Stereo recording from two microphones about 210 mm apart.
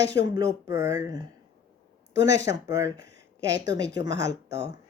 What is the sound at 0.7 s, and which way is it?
Speech, 15° right (ahead or behind).